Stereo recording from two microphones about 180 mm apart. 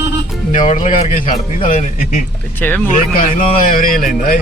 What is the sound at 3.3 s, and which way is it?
Speech, 50° left (ahead or behind).